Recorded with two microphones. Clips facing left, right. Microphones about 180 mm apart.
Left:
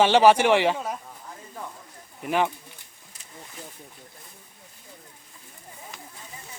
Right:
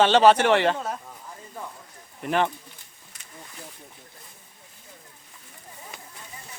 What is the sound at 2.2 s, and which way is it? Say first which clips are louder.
Speech: even; 10° left (ahead or behind).